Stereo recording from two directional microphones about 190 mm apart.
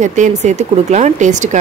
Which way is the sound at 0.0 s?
40° right (ahead or behind).